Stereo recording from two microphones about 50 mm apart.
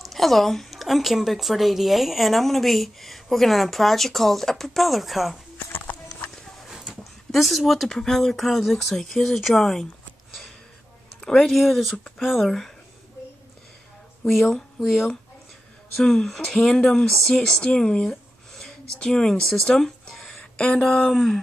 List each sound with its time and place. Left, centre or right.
0.0 s a woman's voice: centre
5.9 s clip-clop: left
6.9 s a sound: centre
8.0 s a woman's voice: centre
11.1 s speech: centre
12.2 s a woman's voice: centre
12.4 s speech: centre
14.2 s a woman's voice: centre
17.4 s speech: centre
20.5 s speech: left
21.1 s a woman's voice: centre